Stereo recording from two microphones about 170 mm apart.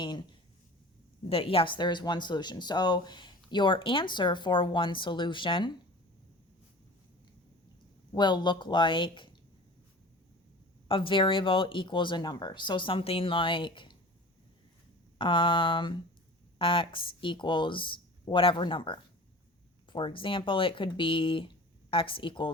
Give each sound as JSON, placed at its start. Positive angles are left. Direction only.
{"t": 0.0, "sound": "speech", "side_deg": 25}
{"t": 8.1, "sound": "speech", "side_deg": 25}
{"t": 10.8, "sound": "speech", "side_deg": 30}
{"t": 15.2, "sound": "speech", "side_deg": 30}